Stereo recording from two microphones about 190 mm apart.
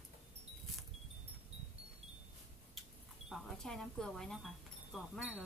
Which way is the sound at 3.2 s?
Centre (ahead or behind).